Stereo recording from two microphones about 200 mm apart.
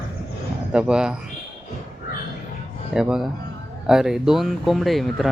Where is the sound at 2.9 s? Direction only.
5° right (ahead or behind).